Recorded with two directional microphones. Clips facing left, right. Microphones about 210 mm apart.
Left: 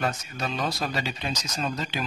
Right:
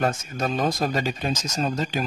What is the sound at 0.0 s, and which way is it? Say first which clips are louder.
Speech: right 5 dB; 50° right (ahead or behind).